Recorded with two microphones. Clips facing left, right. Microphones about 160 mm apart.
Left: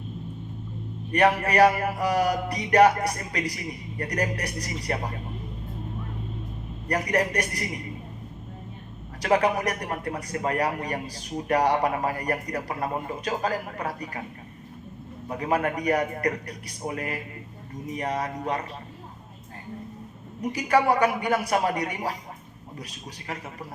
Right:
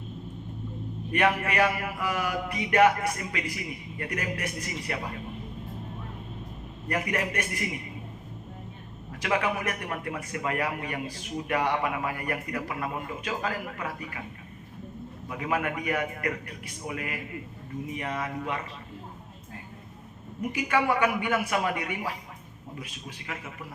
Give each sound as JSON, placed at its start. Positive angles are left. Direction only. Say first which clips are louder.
{"t": 1.1, "sound": "a man's voice", "louder": "left 4 dB", "side_deg": 40}
{"t": 6.8, "sound": "a man's voice", "louder": "left 4 dB", "side_deg": 35}
{"t": 9.2, "sound": "a man's voice", "louder": "left 5 dB", "side_deg": 40}
{"t": 15.3, "sound": "a man's voice", "louder": "left 4 dB", "side_deg": 40}
{"t": 20.4, "sound": "a man's voice", "louder": "left 4 dB", "side_deg": 35}